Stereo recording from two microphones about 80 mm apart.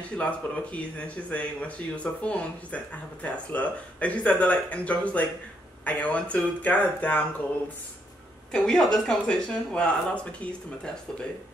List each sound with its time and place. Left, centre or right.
0.2 s speech: centre
8.5 s speech: centre